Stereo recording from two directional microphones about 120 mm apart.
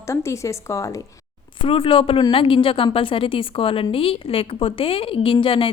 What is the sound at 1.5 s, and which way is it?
A woman's voice, 45° left (ahead or behind).